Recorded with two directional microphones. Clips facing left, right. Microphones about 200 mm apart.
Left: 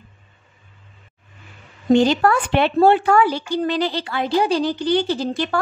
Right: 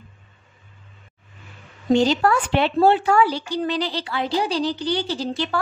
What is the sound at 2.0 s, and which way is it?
A woman's voice, 55° left (ahead or behind).